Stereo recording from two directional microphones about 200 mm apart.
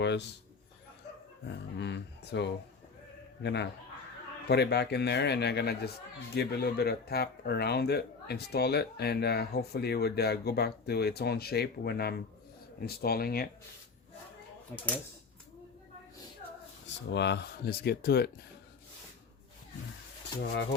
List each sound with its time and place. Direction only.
0.0 s a man's voice: 60° left (ahead or behind)
1.8 s a man's voice: 60° left (ahead or behind)
17.1 s speech: 60° left (ahead or behind)